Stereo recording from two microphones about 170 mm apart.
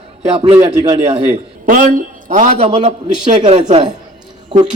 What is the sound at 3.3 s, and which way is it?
Speech, 35° right (ahead or behind).